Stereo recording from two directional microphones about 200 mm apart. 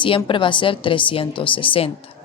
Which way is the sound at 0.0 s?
25° left (ahead or behind).